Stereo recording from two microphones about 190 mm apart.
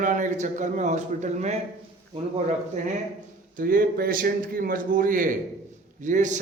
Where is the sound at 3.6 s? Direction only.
50° right (ahead or behind).